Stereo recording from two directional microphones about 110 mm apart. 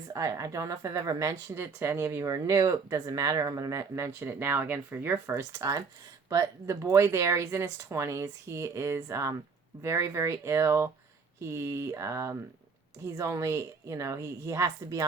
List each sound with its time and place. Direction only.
0.1 s speech: 30° right (ahead or behind)